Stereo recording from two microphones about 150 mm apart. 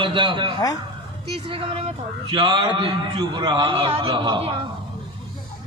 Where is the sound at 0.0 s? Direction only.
35° right (ahead or behind).